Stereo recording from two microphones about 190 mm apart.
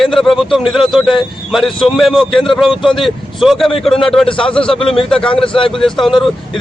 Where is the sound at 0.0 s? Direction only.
Centre (ahead or behind).